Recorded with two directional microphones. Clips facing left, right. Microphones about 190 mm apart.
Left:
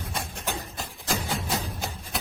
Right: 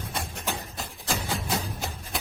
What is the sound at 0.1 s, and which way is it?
Music, centre (ahead or behind).